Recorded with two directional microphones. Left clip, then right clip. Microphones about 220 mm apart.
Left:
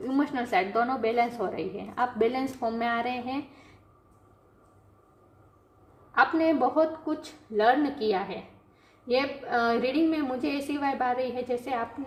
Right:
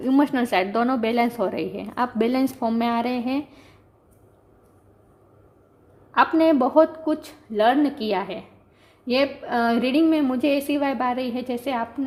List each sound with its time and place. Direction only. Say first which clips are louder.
0.0 s a woman's voice: right 8 dB; 45° right (ahead or behind)
6.1 s a woman's voice: right 5 dB; 45° right (ahead or behind)